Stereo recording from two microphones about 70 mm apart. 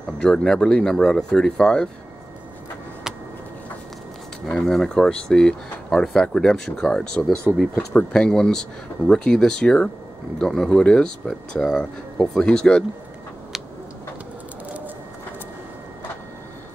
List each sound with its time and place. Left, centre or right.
0.2 s speech: centre
4.5 s speech: centre